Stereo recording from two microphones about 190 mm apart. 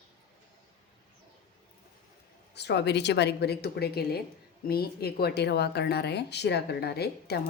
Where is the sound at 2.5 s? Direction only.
60° left (ahead or behind).